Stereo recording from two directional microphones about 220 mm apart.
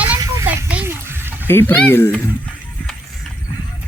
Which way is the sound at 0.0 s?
10° right (ahead or behind).